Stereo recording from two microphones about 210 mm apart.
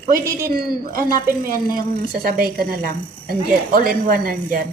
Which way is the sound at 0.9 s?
40° right (ahead or behind).